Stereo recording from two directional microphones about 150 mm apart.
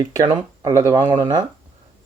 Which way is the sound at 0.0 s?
25° right (ahead or behind).